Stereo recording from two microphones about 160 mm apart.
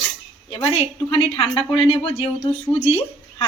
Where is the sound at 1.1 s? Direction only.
35° left (ahead or behind).